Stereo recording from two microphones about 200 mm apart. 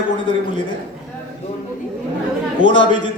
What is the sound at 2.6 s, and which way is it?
Speech, 25° left (ahead or behind).